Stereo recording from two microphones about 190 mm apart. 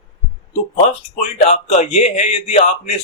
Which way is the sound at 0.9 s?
35° left (ahead or behind).